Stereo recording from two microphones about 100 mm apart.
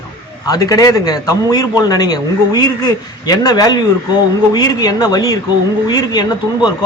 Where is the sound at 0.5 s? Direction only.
35° left (ahead or behind).